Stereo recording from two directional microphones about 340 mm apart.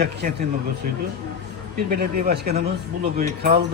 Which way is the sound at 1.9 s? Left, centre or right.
Right.